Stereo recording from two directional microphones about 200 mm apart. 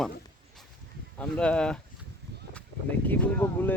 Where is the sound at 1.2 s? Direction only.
5° left (ahead or behind).